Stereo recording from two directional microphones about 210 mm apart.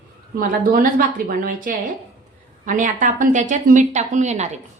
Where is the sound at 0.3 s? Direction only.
45° right (ahead or behind).